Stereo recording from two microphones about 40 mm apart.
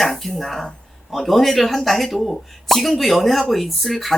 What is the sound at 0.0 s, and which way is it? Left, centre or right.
Speech, centre.